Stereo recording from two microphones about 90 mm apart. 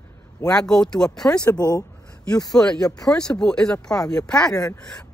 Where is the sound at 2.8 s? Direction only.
40° left (ahead or behind).